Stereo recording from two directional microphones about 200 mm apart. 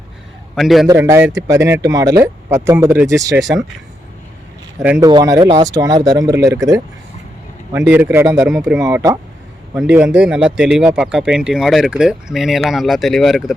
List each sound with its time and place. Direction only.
0.5 s speech: centre (ahead or behind)
0.9 s speech: 15° right (ahead or behind)
4.8 s speech: 10° right (ahead or behind)
5.0 s speech: 20° right (ahead or behind)
8.4 s speech: centre (ahead or behind)
8.8 s speech: 15° right (ahead or behind); by 13.5 s centre (ahead or behind)